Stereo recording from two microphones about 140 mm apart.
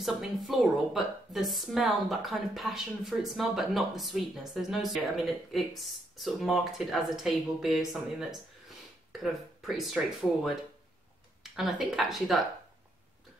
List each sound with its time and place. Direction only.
0.0 s a woman's voice: centre (ahead or behind)
11.4 s a woman's voice: centre (ahead or behind)